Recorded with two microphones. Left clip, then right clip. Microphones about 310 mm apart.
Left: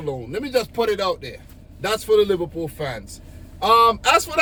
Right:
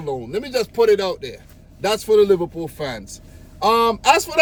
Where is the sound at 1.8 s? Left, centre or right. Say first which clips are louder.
Right 2 dB; centre.